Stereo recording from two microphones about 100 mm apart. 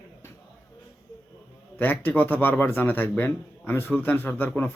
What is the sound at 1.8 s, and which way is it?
Speech, 20° left (ahead or behind).